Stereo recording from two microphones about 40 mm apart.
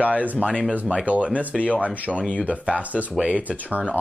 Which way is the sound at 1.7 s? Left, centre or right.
Right.